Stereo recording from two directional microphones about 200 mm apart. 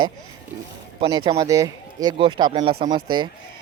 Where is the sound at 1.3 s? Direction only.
15° right (ahead or behind).